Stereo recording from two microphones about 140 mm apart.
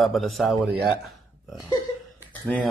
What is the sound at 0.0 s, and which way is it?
Speech, centre (ahead or behind).